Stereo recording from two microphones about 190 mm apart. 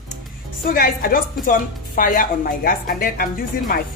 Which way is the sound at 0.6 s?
50° left (ahead or behind).